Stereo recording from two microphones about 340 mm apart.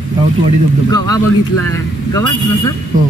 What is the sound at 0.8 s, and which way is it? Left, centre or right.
Speech, centre.